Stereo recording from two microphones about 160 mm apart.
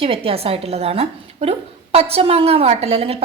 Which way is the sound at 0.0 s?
35° right (ahead or behind).